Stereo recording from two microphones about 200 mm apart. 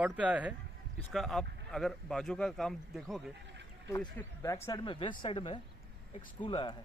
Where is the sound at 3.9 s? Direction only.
15° left (ahead or behind).